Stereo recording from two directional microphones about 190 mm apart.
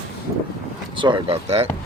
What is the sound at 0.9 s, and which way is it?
Speech, 25° right (ahead or behind).